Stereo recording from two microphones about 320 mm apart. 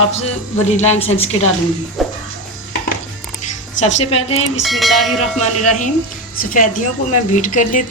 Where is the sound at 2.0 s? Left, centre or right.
Centre.